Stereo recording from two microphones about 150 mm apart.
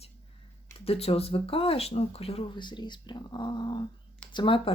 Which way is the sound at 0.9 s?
40° left (ahead or behind).